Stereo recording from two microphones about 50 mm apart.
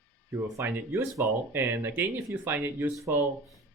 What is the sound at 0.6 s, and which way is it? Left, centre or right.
Speech, right.